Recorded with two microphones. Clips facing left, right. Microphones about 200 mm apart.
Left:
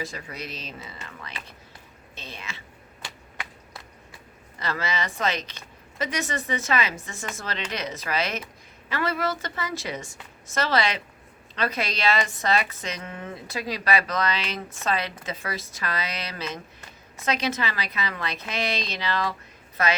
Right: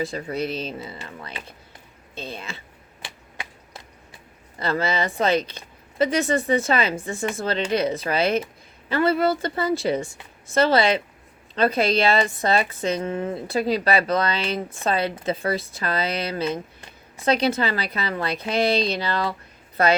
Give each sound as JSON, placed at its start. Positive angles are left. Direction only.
{"t": 0.1, "sound": "speech", "side_deg": -30}
{"t": 4.6, "sound": "a woman's voice", "side_deg": -30}